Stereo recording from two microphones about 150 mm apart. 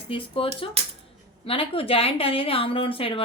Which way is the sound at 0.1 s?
35° left (ahead or behind).